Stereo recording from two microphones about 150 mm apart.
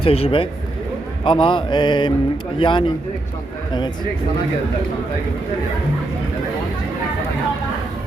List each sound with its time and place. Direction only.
0.0 s music: 40° left (ahead or behind)